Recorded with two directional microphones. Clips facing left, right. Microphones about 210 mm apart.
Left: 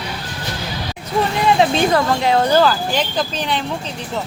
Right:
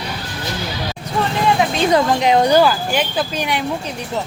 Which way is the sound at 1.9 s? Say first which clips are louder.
Right 2 dB; 20° right (ahead or behind).